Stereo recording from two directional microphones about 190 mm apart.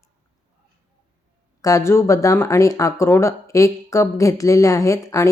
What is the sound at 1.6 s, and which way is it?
Speech, 15° left (ahead or behind).